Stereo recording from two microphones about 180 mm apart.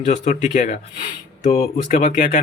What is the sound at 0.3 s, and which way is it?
Speech, 40° left (ahead or behind).